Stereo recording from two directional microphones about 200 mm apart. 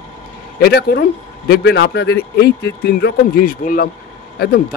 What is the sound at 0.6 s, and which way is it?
A man's voice, 50° left (ahead or behind).